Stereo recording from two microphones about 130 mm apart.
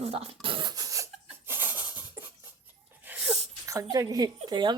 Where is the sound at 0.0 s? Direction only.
50° right (ahead or behind); by 1.0 s 25° right (ahead or behind).